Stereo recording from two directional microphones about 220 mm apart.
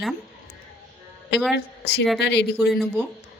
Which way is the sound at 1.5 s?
50° left (ahead or behind).